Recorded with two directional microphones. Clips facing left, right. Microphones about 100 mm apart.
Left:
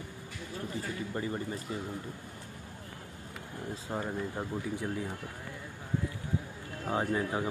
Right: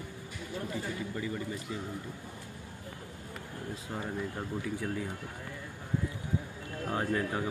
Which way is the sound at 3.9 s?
30° left (ahead or behind).